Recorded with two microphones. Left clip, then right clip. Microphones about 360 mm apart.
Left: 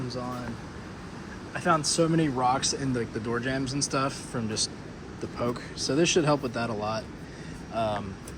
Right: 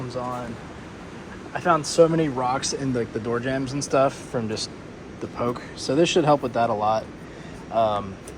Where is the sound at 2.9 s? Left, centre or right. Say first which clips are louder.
Right 5 dB; right.